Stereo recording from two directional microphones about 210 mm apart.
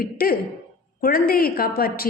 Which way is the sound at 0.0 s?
45° left (ahead or behind).